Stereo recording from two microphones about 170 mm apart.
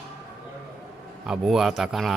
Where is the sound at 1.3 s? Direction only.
Centre (ahead or behind).